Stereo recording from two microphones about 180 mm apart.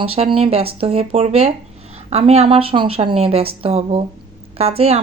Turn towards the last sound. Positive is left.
turn(degrees=-35)  # may be behind; listen again after turning